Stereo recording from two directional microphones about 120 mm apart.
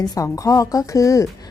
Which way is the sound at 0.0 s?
30° left (ahead or behind).